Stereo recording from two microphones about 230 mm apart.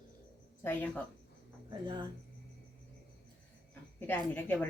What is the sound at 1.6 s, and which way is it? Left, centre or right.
Speech, centre.